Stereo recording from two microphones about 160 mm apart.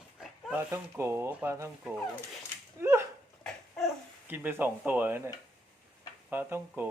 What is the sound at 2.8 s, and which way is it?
Whip, 15° right (ahead or behind).